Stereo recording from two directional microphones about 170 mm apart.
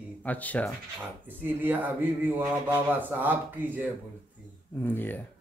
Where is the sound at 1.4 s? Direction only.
10° right (ahead or behind).